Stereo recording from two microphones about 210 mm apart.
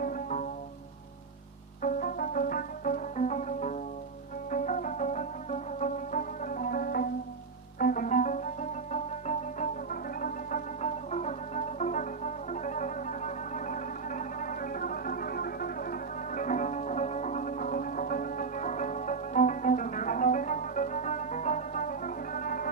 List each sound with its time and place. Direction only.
0.0 s music: 40° left (ahead or behind)
1.8 s music: 40° left (ahead or behind)